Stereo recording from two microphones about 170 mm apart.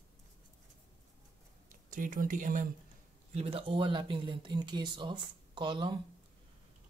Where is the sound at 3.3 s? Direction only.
35° right (ahead or behind).